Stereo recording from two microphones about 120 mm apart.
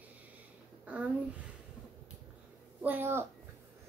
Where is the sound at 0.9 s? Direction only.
10° right (ahead or behind).